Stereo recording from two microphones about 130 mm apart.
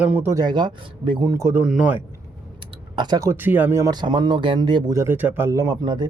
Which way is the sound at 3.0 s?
30° right (ahead or behind).